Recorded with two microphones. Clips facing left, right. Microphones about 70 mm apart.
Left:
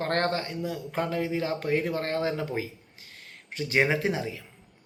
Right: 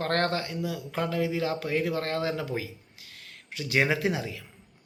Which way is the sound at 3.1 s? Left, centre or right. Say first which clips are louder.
Left 1 dB; left.